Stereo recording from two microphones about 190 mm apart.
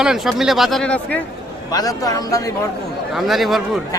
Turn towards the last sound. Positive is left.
turn(degrees=0)  # may be behind; listen again after turning